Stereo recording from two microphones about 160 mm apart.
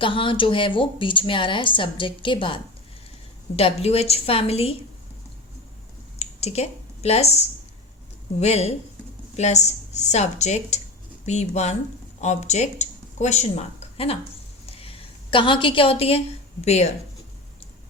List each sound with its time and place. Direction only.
0.0 s a woman's voice: 30° left (ahead or behind)
6.1 s a sound: 40° left (ahead or behind)
8.4 s a woman's voice: 40° left (ahead or behind)